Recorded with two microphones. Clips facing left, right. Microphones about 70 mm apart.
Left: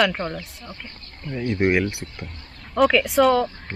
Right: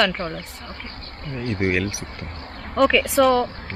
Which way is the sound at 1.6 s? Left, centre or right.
Centre.